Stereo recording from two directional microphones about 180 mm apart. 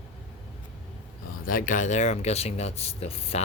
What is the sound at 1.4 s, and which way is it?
Speech, 50° left (ahead or behind).